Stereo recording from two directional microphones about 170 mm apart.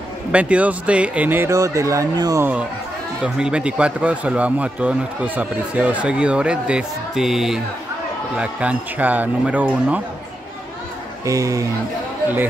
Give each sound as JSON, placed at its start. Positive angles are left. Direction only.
{"t": 0.3, "sound": "a man's voice", "side_deg": -5}
{"t": 3.3, "sound": "a man's voice", "side_deg": -5}
{"t": 11.2, "sound": "speech", "side_deg": -20}